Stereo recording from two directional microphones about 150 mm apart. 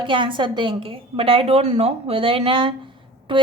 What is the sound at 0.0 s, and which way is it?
Speech, 35° right (ahead or behind).